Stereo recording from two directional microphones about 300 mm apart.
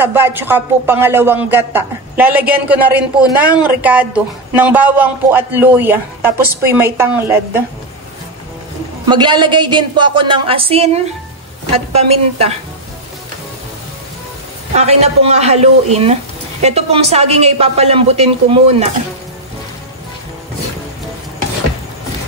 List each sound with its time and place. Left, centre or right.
0.0 s speech: centre
9.1 s speech: centre
14.7 s speech: right